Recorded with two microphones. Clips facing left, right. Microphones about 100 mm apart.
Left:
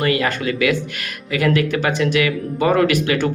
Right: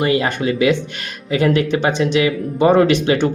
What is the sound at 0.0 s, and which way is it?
Speech, 25° right (ahead or behind).